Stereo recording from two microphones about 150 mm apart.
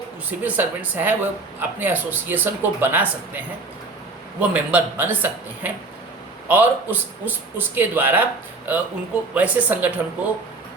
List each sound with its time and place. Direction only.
0.3 s speech: 10° right (ahead or behind)